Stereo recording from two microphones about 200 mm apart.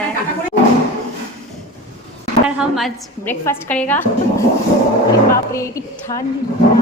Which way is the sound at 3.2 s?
10° left (ahead or behind).